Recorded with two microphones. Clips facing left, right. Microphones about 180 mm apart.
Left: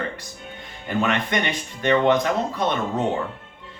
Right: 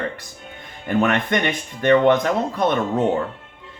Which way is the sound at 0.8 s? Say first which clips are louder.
Right 4 dB; 50° right (ahead or behind).